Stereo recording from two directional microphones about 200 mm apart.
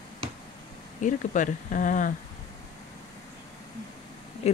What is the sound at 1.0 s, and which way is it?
A woman's voice, 40° left (ahead or behind).